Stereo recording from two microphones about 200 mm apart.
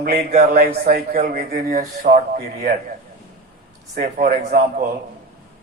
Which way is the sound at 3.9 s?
45° right (ahead or behind).